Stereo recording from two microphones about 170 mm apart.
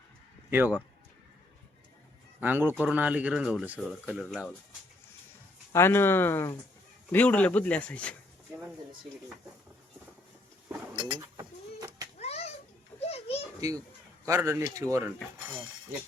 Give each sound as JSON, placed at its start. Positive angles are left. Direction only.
{"t": 0.5, "sound": "speech", "side_deg": -10}
{"t": 2.4, "sound": "speech", "side_deg": -10}
{"t": 5.7, "sound": "speech", "side_deg": 15}
{"t": 10.9, "sound": "a sound", "side_deg": -25}
{"t": 12.2, "sound": "children playing", "side_deg": 40}
{"t": 13.6, "sound": "a child's voice", "side_deg": -20}